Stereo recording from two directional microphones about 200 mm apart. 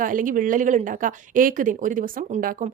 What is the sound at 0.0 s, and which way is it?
A woman's voice, 40° right (ahead or behind).